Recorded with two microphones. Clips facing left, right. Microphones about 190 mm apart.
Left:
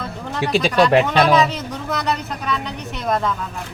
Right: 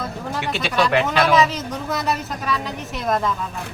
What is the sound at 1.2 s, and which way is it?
A woman's voice, centre (ahead or behind).